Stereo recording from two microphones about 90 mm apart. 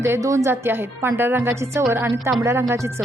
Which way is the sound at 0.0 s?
35° right (ahead or behind).